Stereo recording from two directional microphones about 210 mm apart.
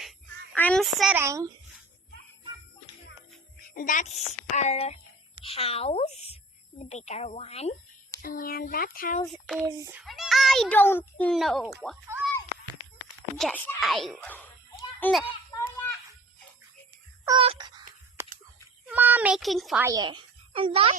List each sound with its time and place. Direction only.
0.5 s a child's voice: 5° left (ahead or behind)
1.2 s speech: 15° right (ahead or behind)
3.8 s a child's voice: 40° left (ahead or behind)
8.2 s a sound: 45° left (ahead or behind)
9.2 s a child's voice: centre (ahead or behind)
9.7 s speech: 15° right (ahead or behind)
10.0 s a child's voice: centre (ahead or behind)
12.1 s speech: 10° right (ahead or behind)
13.4 s speech: 5° left (ahead or behind)
15.5 s a sound: 10° left (ahead or behind)
17.2 s a sound: 25° right (ahead or behind)
18.2 s a sound: 10° right (ahead or behind)
18.9 s a child's voice: 10° right (ahead or behind)
19.8 s a child's voice: 20° right (ahead or behind)